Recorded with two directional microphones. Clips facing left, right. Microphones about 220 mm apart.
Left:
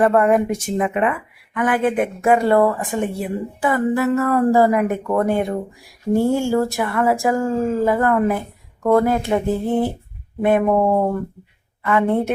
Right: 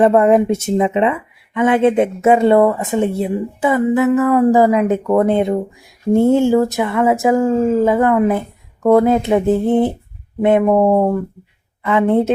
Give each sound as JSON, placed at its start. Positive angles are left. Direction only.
{"t": 0.0, "sound": "speech", "side_deg": -25}